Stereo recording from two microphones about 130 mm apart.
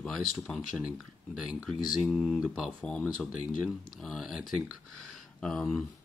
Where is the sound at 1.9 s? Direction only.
5° right (ahead or behind).